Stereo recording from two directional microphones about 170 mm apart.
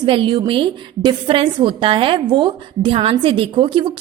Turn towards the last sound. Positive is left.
turn(degrees=-30)  # may be behind; listen again after turning